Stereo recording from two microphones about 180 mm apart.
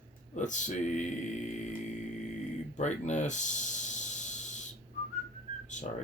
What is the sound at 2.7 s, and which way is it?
Snake, 40° left (ahead or behind).